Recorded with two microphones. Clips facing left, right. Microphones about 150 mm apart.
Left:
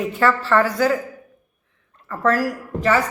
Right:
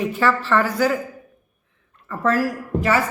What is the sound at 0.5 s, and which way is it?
Speech, 10° right (ahead or behind).